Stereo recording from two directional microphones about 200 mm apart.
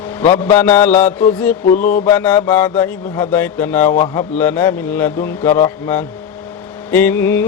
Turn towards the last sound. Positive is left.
turn(degrees=10)  # may be behind; listen again after turning